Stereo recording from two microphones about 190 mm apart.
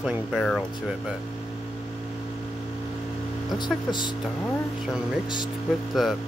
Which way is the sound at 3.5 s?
25° left (ahead or behind).